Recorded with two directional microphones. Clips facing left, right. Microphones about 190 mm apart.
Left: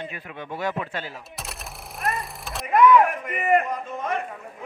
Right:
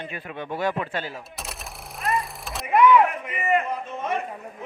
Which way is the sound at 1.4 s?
Centre (ahead or behind).